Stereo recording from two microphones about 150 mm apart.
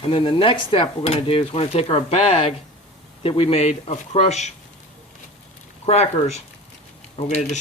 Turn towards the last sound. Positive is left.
turn(degrees=50)  # may be behind; listen again after turning